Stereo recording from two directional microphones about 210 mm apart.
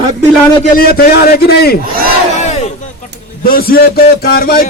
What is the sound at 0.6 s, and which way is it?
A man's voice, 45° left (ahead or behind).